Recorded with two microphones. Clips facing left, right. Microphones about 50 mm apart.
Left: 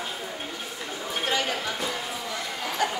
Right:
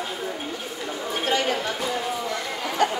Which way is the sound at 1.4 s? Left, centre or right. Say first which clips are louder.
Right 3 dB; centre.